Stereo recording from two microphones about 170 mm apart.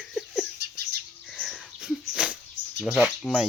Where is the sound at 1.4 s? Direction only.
Centre (ahead or behind).